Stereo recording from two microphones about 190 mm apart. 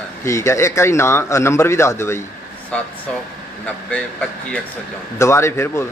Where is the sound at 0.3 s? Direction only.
15° left (ahead or behind).